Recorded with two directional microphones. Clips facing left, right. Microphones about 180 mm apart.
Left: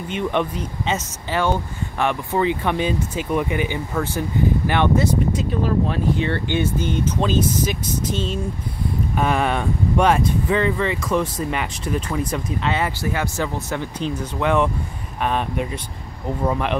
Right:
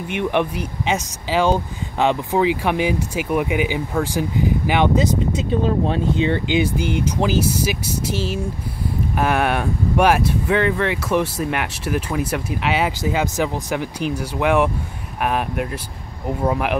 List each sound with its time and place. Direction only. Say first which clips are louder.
0.2 s speech: right 2 dB; 10° right (ahead or behind)
9.1 s speech: right 1 dB; 5° right (ahead or behind)